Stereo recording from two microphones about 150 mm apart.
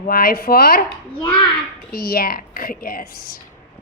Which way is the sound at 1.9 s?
85° left.